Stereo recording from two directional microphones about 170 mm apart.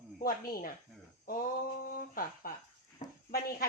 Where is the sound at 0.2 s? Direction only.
60° left (ahead or behind).